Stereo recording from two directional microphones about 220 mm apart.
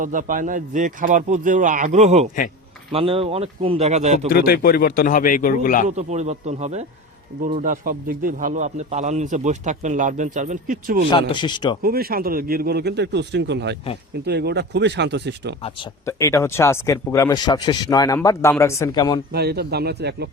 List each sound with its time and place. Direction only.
0.0 s a man's voice: 35° right (ahead or behind)
4.3 s a man's voice: 40° left (ahead or behind)
6.0 s a man's voice: 30° right (ahead or behind)
11.1 s speech: 20° left (ahead or behind)
11.8 s a man's voice: 45° right (ahead or behind)
16.0 s a man's voice: 15° left (ahead or behind)
19.3 s a man's voice: 45° right (ahead or behind)